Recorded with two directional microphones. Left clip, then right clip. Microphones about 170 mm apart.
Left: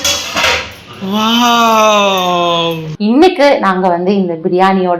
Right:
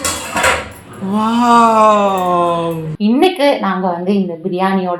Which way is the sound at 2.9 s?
30° left (ahead or behind).